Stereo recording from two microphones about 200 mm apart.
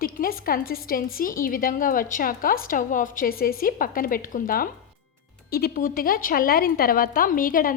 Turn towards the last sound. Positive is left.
turn(degrees=45)  # may be behind; listen again after turning